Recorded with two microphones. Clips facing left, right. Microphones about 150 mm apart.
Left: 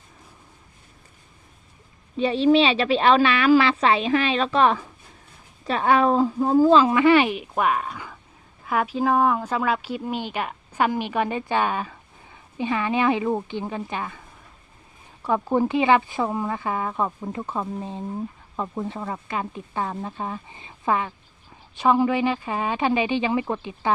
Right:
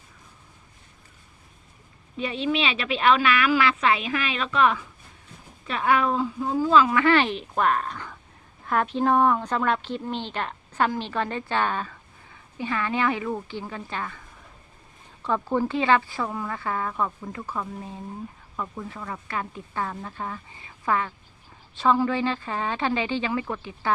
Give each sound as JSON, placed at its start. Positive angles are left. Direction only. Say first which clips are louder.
{"t": 2.1, "sound": "a woman's voice", "louder": "left 8 dB", "side_deg": 30}
{"t": 7.0, "sound": "a woman's voice", "louder": "left 4 dB", "side_deg": 15}
{"t": 15.2, "sound": "a woman's voice", "louder": "left 3 dB", "side_deg": 15}